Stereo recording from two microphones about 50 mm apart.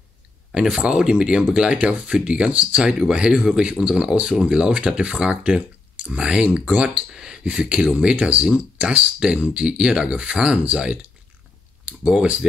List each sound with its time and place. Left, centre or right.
0.6 s speech: centre
7.1 s speech: centre
12.0 s speech: centre